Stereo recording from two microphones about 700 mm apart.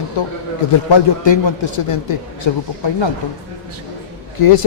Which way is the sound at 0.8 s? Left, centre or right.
Left.